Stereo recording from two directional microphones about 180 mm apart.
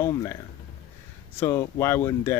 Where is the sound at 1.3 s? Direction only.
15° left (ahead or behind).